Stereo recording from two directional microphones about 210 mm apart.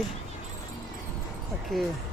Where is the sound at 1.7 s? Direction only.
Centre (ahead or behind).